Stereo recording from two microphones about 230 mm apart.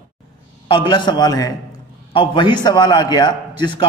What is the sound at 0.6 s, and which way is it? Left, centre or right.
Mantra, left.